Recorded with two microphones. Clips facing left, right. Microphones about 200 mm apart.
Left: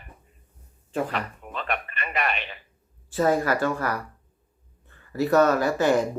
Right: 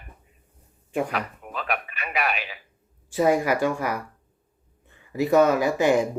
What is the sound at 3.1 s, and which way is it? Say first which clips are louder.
Speech: right 1 dB; 15° right (ahead or behind).